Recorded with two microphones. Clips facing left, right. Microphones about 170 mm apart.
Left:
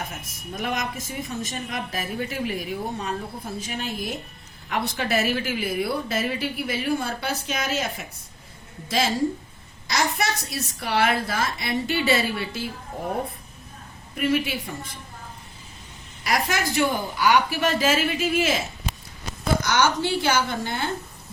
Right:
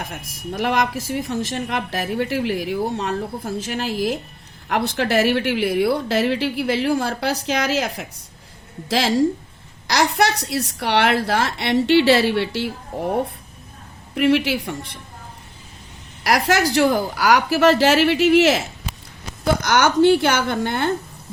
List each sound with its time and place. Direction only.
0.1 s speech: 70° right (ahead or behind); by 3.9 s 85° right
4.9 s a woman's voice: 75° right (ahead or behind)
14.2 s speech: 75° right (ahead or behind)
16.2 s a woman's voice: 90° right
19.6 s a woman's voice: 55° right (ahead or behind)